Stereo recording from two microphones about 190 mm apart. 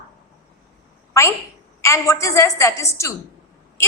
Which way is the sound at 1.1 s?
15° left (ahead or behind).